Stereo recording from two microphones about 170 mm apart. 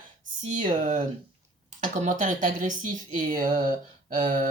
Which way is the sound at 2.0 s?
45° right (ahead or behind).